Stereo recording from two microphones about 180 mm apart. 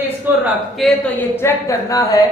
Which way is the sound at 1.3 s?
15° left (ahead or behind).